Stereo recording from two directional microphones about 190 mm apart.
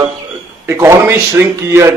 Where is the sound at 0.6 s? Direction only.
15° right (ahead or behind).